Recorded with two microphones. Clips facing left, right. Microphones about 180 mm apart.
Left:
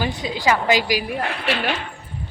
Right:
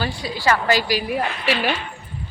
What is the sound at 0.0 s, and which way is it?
A woman's voice, 20° left (ahead or behind).